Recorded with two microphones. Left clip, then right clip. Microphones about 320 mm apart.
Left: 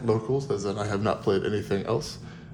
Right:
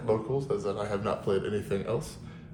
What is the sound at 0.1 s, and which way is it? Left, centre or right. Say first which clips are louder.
Speech: left 2 dB; left.